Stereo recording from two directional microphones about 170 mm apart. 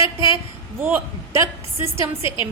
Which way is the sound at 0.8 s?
15° right (ahead or behind).